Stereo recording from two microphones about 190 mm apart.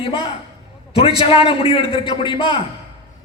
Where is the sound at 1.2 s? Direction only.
30° left (ahead or behind).